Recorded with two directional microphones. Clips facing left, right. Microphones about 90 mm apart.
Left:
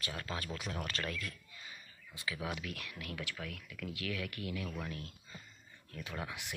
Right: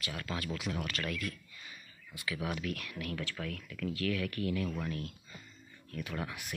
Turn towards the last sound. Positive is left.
turn(degrees=20)  # may be behind; listen again after turning